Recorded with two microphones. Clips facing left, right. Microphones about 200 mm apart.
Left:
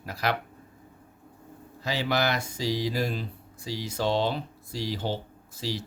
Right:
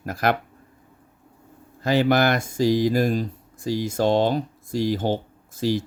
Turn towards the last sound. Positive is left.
turn(degrees=-50)  # may be behind; listen again after turning